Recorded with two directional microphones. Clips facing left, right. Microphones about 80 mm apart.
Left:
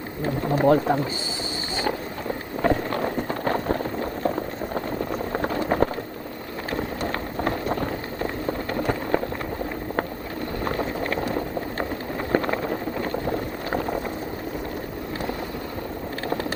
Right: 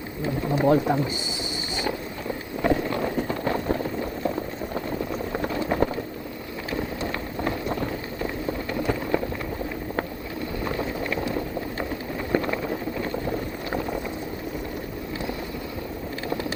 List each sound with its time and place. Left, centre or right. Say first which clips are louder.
0.3 s speech: left 2 dB; left
1.7 s vehicle: left 2 dB; left
2.6 s run: left 1 dB; left
10.6 s boiling: left 2 dB; left
12.3 s a sound: left 2 dB; left
13.0 s boat: left 2 dB; left